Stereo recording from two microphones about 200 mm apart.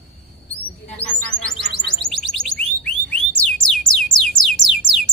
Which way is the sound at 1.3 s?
65° left (ahead or behind).